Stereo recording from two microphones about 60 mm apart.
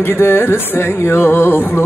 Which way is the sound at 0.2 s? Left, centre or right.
Left.